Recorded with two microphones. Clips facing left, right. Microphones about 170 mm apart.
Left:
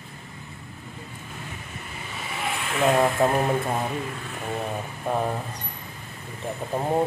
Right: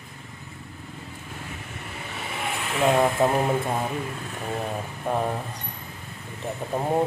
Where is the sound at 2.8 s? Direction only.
Centre (ahead or behind).